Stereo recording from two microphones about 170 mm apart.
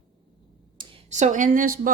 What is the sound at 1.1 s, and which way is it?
Speech, 45° right (ahead or behind).